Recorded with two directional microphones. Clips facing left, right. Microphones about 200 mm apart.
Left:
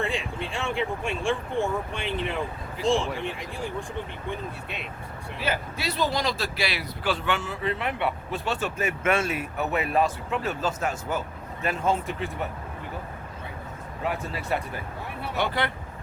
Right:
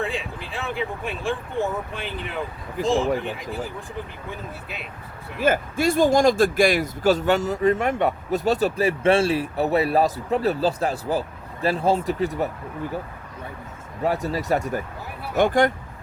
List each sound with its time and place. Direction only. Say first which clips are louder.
0.0 s speech: right 1 dB; centre (ahead or behind)
5.4 s speech: right 9 dB; 50° right (ahead or behind)
14.0 s speech: right 7 dB; 40° right (ahead or behind)